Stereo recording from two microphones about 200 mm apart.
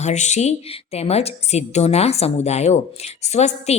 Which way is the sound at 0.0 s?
35° left (ahead or behind).